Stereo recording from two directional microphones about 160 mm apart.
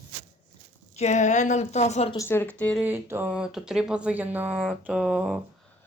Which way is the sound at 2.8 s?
10° right (ahead or behind).